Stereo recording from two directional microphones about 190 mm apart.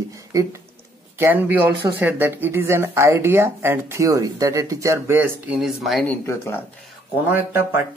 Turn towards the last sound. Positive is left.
turn(degrees=-10)  # may be behind; listen again after turning